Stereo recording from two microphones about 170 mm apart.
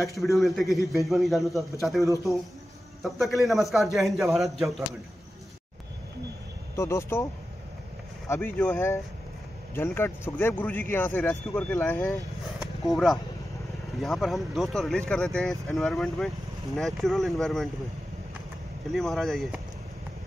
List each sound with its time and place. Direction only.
0.1 s a man's voice: centre (ahead or behind)
6.7 s speech: 15° left (ahead or behind)
8.3 s speech: 15° left (ahead or behind)
18.9 s speech: centre (ahead or behind)